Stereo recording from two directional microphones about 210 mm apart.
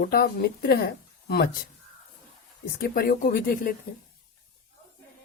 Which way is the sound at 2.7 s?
45° left (ahead or behind).